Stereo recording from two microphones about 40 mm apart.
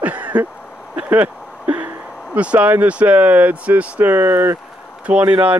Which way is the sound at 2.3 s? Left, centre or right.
Right.